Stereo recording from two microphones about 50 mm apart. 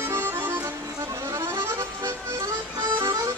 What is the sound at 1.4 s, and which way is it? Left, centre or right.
Music, right.